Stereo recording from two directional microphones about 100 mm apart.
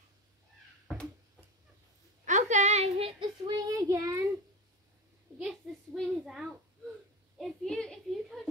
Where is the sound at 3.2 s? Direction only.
45° right (ahead or behind).